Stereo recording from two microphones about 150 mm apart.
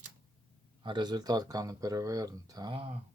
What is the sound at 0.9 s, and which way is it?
Speech, 30° right (ahead or behind).